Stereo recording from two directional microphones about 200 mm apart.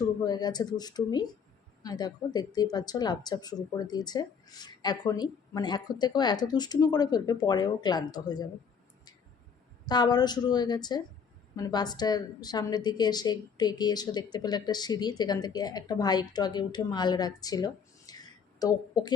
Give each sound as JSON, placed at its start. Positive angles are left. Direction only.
{"t": 0.3, "sound": "speech", "side_deg": 20}
{"t": 9.8, "sound": "speech", "side_deg": 20}